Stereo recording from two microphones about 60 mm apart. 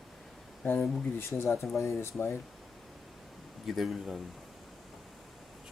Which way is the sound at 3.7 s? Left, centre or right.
Centre.